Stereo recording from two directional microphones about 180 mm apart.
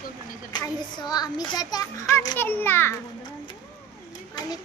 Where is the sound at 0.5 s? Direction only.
25° left (ahead or behind).